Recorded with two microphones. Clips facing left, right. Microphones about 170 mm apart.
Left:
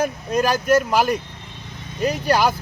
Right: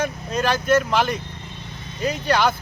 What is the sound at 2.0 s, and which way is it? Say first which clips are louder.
Speech: left 2 dB; 40° left (ahead or behind).